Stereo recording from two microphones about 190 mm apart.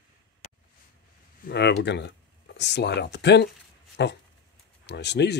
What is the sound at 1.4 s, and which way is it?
Speech, 60° left (ahead or behind).